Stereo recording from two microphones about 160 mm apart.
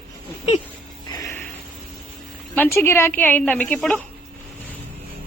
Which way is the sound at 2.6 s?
15° left (ahead or behind).